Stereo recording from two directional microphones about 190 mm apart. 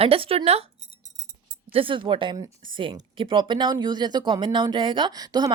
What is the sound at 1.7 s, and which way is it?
A woman's voice, 25° right (ahead or behind).